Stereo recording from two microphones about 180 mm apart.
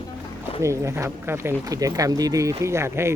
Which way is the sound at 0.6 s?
15° right (ahead or behind).